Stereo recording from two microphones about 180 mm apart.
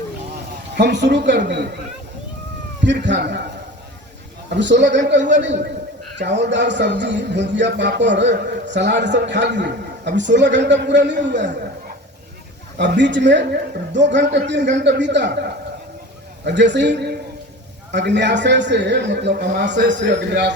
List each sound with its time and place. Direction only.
0.8 s a man's voice: 70° right (ahead or behind)
2.8 s speech: 80° right
4.4 s a man's voice: 75° right (ahead or behind)
12.7 s a man's voice: 70° right (ahead or behind)
16.4 s a man's voice: 75° right (ahead or behind)